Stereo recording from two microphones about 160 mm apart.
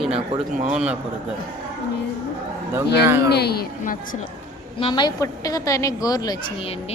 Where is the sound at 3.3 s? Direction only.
85° left; by 4.2 s 60° left (ahead or behind).